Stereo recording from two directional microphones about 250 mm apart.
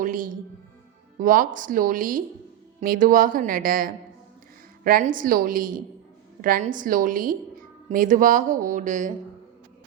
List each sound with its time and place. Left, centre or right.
0.0 s a woman's voice: right